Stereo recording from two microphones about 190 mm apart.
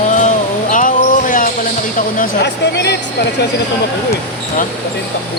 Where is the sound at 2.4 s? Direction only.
60° left (ahead or behind).